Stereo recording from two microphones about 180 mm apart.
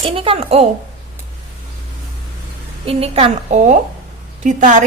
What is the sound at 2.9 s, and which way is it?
A woman's voice, 35° right (ahead or behind).